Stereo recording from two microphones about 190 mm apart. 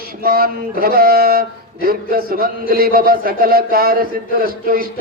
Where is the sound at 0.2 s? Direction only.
50° right (ahead or behind).